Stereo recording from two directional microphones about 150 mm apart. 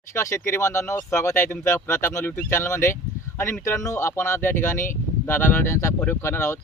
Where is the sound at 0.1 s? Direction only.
20° left (ahead or behind).